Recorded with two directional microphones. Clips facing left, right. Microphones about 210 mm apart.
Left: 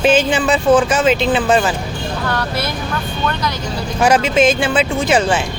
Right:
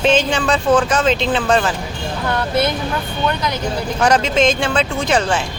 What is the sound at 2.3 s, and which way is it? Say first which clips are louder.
Speech: right 7 dB; 25° right (ahead or behind).